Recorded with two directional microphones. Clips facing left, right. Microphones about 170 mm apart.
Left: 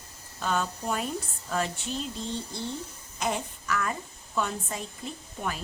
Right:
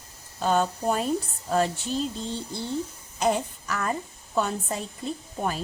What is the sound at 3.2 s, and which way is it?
Child singing, 35° right (ahead or behind).